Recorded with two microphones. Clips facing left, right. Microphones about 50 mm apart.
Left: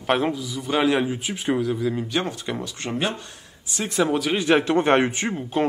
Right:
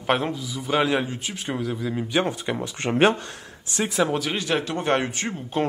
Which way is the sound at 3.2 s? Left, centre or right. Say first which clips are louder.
Right 5 dB; right.